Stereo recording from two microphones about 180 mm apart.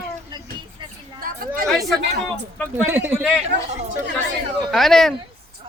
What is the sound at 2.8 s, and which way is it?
Speech, 10° right (ahead or behind).